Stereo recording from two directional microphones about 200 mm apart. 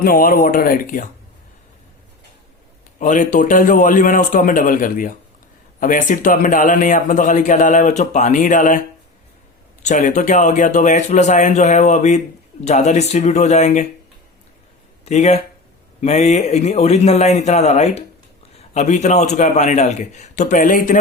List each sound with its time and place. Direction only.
0.0 s speech: 45° left (ahead or behind)
3.0 s a man's voice: 40° left (ahead or behind)
9.8 s a man's voice: 35° left (ahead or behind)
15.0 s a man's voice: 35° left (ahead or behind)